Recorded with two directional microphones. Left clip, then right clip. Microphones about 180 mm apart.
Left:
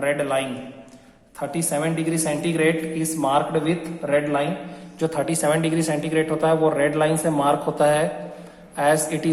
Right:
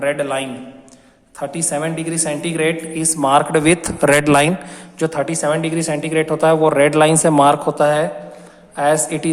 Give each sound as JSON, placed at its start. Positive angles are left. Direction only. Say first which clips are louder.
{"t": 0.0, "sound": "a woman's voice", "louder": "right 3 dB", "side_deg": -15}
{"t": 3.6, "sound": "a man's voice", "louder": "right 10 dB", "side_deg": -50}
{"t": 4.9, "sound": "a woman's voice", "louder": "right 4 dB", "side_deg": -15}